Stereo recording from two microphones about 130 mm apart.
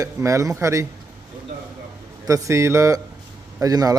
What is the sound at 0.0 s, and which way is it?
Speech, 25° right (ahead or behind).